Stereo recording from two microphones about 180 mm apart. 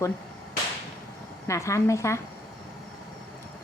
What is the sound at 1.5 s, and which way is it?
Speech, 15° left (ahead or behind).